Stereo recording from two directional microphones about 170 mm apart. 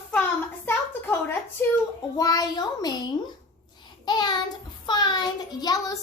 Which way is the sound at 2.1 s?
20° left (ahead or behind).